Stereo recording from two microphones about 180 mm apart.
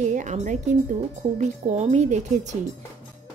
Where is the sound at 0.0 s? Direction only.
40° right (ahead or behind).